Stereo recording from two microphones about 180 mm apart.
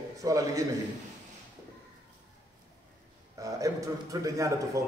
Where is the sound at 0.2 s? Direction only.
20° right (ahead or behind).